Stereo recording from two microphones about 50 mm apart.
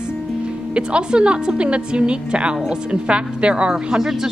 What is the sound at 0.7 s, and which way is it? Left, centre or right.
A woman's voice, centre.